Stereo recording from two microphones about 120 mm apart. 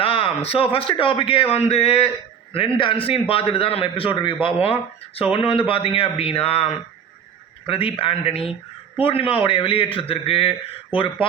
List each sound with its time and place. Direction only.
0.0 s a man's voice: 50° left (ahead or behind)
7.7 s a man's voice: 45° left (ahead or behind)